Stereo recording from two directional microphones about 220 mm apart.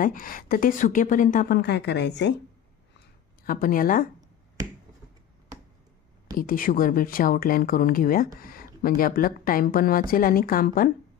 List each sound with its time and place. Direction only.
0.0 s speech: 40° left (ahead or behind)
3.4 s speech: 40° left (ahead or behind)
6.3 s speech: 40° left (ahead or behind)